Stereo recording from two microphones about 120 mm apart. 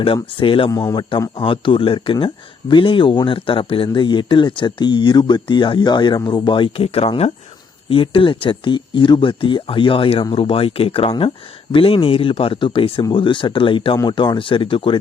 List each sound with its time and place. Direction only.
0.0 s speech: 45° left (ahead or behind)
0.7 s speech: 35° left (ahead or behind)